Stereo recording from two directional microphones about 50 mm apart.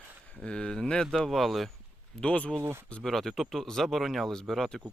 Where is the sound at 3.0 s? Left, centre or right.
Centre.